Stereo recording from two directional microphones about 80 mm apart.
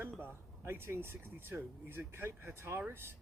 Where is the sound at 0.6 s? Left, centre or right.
Right.